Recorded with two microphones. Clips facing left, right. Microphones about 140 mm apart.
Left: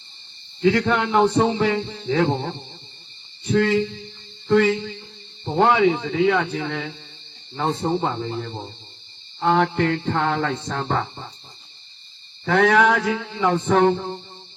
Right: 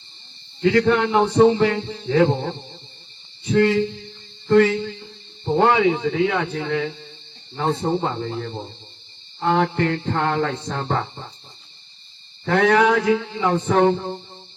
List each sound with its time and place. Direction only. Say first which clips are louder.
0.6 s a man's voice: right 2 dB; centre (ahead or behind)
4.4 s a man's voice: right 2 dB; centre (ahead or behind)
12.5 s a man's voice: even; centre (ahead or behind)